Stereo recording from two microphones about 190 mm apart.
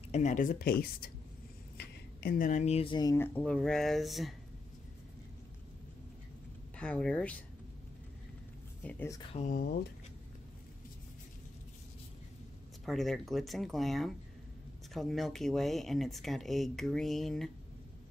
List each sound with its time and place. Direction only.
0.1 s speech: 40° left (ahead or behind); by 4.4 s centre (ahead or behind)
6.8 s speech: 5° left (ahead or behind)
8.8 s speech: 10° left (ahead or behind)
9.3 s speech: 40° left (ahead or behind)
12.8 s speech: centre (ahead or behind)